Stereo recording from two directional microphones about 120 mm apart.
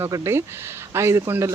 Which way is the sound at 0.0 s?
20° right (ahead or behind).